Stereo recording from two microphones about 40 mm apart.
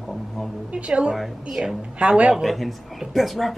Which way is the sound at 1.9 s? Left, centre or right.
Right.